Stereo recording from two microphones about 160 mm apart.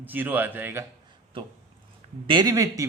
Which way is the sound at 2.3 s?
25° right (ahead or behind).